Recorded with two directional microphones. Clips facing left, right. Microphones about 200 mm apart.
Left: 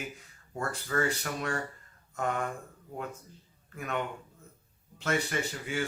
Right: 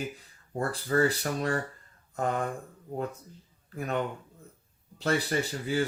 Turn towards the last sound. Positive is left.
turn(degrees=-35)  # may be behind; listen again after turning